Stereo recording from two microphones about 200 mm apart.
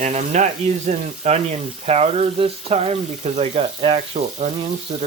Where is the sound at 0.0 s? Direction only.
35° right (ahead or behind).